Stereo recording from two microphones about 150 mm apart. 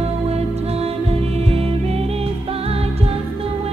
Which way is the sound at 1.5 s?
40° right (ahead or behind).